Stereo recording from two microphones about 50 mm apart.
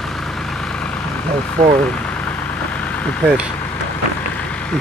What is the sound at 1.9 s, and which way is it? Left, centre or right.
Vehicle, left.